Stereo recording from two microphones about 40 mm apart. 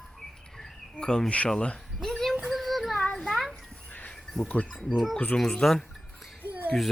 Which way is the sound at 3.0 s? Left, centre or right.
Centre.